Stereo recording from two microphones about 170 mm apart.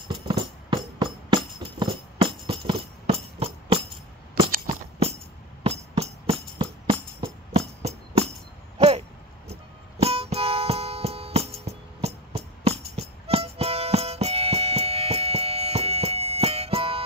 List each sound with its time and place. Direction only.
0.3 s music: 25° right (ahead or behind)
5.6 s music: 40° right (ahead or behind)
8.7 s a sound: 40° right (ahead or behind)
9.9 s music: 35° right (ahead or behind)